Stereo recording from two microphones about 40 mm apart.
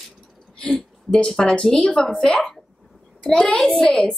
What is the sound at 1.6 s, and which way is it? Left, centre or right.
A woman's voice, centre.